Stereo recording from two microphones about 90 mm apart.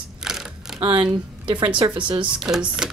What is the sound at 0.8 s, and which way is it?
Speech, 65° right (ahead or behind).